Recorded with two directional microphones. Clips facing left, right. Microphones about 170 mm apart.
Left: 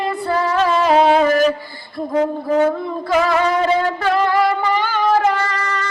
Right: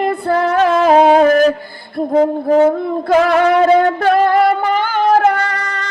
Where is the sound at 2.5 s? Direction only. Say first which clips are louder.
Right 5 dB; 30° right (ahead or behind).